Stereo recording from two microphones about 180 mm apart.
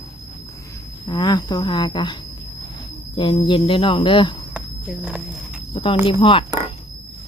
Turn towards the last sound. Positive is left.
turn(degrees=30)  # may be behind; listen again after turning